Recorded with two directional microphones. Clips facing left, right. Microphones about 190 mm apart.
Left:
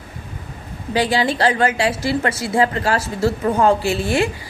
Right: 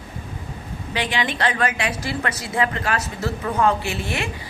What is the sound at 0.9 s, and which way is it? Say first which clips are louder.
A woman's voice: left 7 dB; 35° left (ahead or behind).